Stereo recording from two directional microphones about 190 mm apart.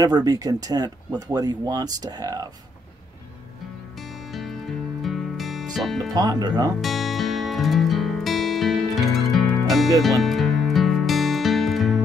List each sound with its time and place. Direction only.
0.0 s speech: 20° right (ahead or behind)
5.0 s music: centre (ahead or behind)
6.1 s speech: 20° right (ahead or behind)
6.8 s music: centre (ahead or behind)